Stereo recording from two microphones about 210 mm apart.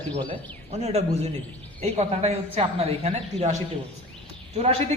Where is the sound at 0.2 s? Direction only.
30° right (ahead or behind).